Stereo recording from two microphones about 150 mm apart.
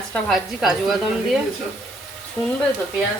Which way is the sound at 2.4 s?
15° left (ahead or behind).